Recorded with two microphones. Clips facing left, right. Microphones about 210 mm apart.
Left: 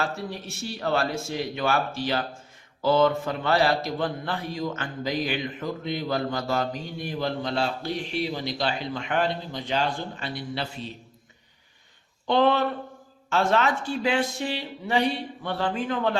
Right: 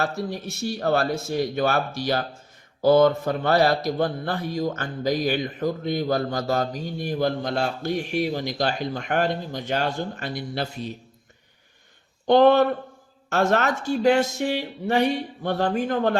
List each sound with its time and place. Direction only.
0.0 s a man's voice: 40° right (ahead or behind)
12.3 s a man's voice: 45° right (ahead or behind)